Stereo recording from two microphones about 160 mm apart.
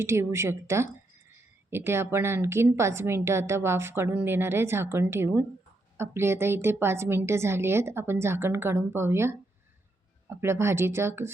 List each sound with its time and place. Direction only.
0.0 s a woman's voice: 15° right (ahead or behind)